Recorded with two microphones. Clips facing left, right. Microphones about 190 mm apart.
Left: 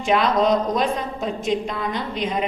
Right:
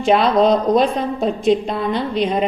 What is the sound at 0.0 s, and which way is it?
Speech, 35° right (ahead or behind).